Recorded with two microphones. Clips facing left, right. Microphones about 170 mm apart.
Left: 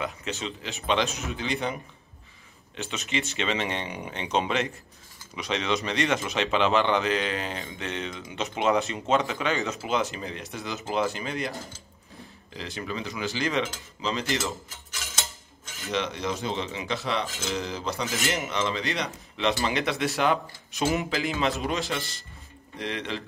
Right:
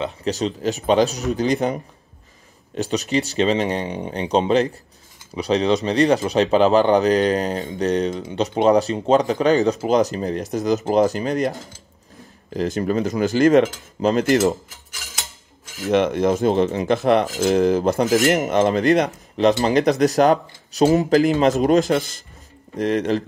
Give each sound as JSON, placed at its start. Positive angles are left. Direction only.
{"t": 0.0, "sound": "speech", "side_deg": -35}
{"t": 12.5, "sound": "speech", "side_deg": -45}
{"t": 15.8, "sound": "speech", "side_deg": -55}
{"t": 18.4, "sound": "speech", "side_deg": -50}